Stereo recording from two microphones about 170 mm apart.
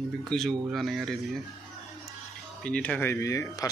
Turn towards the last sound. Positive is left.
turn(degrees=20)  # may be behind; listen again after turning